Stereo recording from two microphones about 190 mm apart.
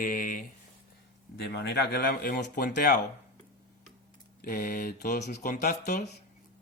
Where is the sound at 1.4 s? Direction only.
65° left (ahead or behind).